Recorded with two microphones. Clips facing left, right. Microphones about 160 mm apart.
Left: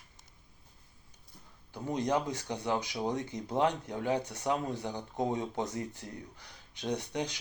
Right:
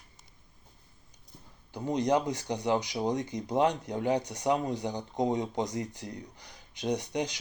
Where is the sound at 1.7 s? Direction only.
15° right (ahead or behind).